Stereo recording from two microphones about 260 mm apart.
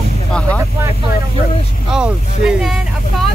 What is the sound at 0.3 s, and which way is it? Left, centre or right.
Vehicle, centre.